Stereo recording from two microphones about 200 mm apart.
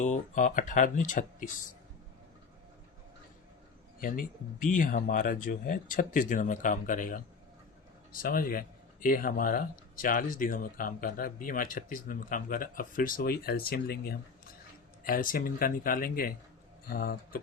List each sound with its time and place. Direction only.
0.0 s speech: 35° left (ahead or behind)
4.0 s speech: 45° left (ahead or behind)